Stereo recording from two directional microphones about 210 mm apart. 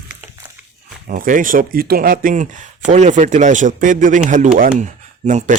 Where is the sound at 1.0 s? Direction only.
40° right (ahead or behind).